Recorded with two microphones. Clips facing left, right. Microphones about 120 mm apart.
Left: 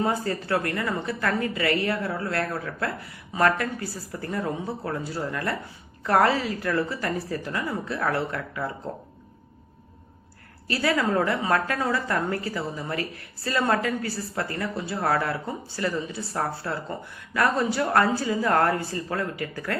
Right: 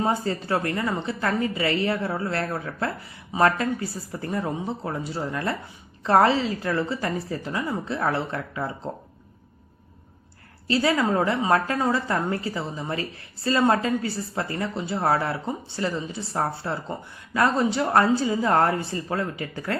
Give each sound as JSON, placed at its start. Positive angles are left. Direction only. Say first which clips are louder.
{"t": 0.0, "sound": "a woman's voice", "louder": "right 1 dB", "side_deg": -25}
{"t": 10.7, "sound": "a woman's voice", "louder": "right 2 dB", "side_deg": -25}